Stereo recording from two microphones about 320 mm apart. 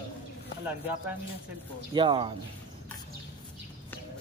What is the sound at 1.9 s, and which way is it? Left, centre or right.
Speech, centre.